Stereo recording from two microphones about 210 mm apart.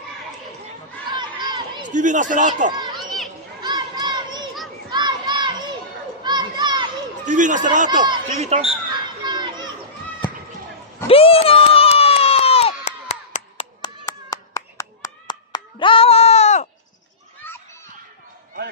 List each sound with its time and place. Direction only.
1.1 s a sound: 20° right (ahead or behind)
1.9 s speech: 35° right (ahead or behind)
2.7 s a child's voice: 20° right (ahead or behind)
3.6 s a sound: 20° right (ahead or behind)
4.8 s children playing: 20° right (ahead or behind)
7.2 s speech: 35° right (ahead or behind)
8.0 s speech: 25° right (ahead or behind)
9.2 s children playing: 20° right (ahead or behind)
11.1 s crowd: 25° left (ahead or behind)
17.4 s children playing: 10° left (ahead or behind)